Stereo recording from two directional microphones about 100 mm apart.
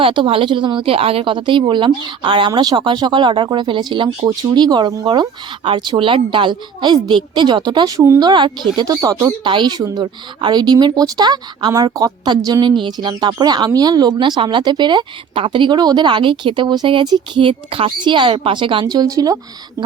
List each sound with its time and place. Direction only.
0.0 s a woman's voice: 60° right (ahead or behind); by 5.0 s 40° right (ahead or behind)
5.0 s a woman's voice: 50° right (ahead or behind)
7.9 s speech: 30° right (ahead or behind)
8.2 s a woman's voice: 50° right (ahead or behind)
8.8 s speech: 35° right (ahead or behind)
9.5 s a woman's voice: 50° right (ahead or behind)
11.7 s a woman's voice: 35° right (ahead or behind)
17.4 s speech: 65° right (ahead or behind)
18.9 s speech: 40° right (ahead or behind)